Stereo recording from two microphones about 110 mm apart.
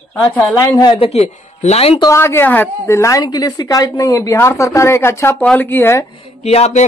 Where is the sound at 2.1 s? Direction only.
20° left (ahead or behind).